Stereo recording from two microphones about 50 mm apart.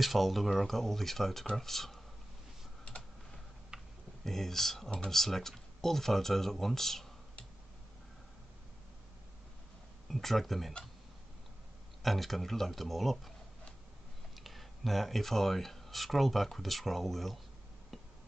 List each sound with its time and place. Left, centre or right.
0.0 s speech: centre
3.7 s a sound: centre
4.2 s speech: centre
10.0 s speech: centre
12.0 s speech: centre
14.4 s speech: centre